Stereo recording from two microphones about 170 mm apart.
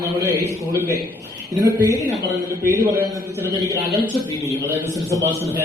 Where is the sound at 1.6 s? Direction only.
15° right (ahead or behind).